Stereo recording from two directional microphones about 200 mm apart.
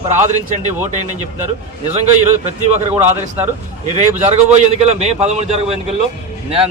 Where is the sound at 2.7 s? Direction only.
35° right (ahead or behind).